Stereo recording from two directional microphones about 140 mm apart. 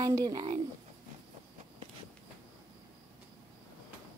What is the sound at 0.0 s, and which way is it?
Speech, 25° right (ahead or behind).